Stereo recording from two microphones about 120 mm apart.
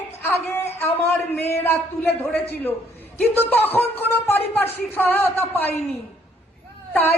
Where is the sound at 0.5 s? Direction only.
20° left (ahead or behind).